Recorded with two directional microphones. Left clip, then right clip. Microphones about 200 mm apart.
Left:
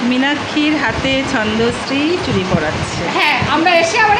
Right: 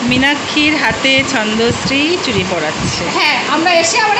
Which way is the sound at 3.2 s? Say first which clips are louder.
Even; 20° right (ahead or behind).